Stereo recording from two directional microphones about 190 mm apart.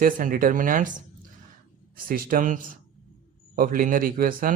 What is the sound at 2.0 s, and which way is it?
Speech, 50° right (ahead or behind).